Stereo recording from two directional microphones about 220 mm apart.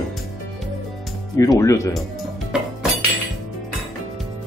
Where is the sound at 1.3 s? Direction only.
15° left (ahead or behind).